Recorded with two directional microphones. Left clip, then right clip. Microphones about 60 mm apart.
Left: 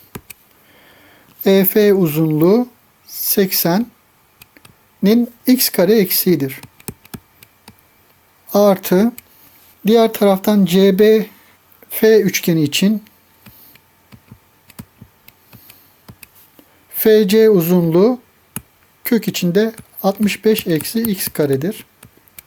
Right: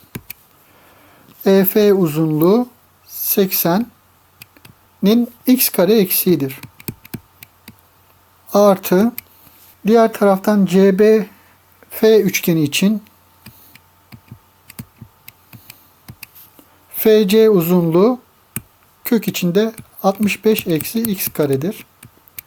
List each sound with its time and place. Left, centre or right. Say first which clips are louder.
0.7 s speech: left 2 dB; centre
5.0 s speech: left 1 dB; left
6.7 s hands: right 2 dB; right
8.4 s speech: right 1 dB; centre
9.8 s speech: even; left
13.4 s a sound: right 2 dB; right
14.7 s computer keyboard: right 2 dB; right
15.3 s a sound: right 4 dB; right
16.9 s speech: left 1 dB; centre
22.4 s a sound: right 4 dB; right